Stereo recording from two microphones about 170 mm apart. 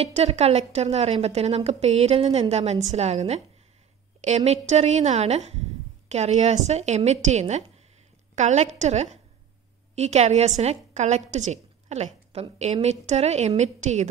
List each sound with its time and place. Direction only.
0.0 s a woman's voice: 40° right (ahead or behind)
4.5 s a woman's voice: 40° right (ahead or behind)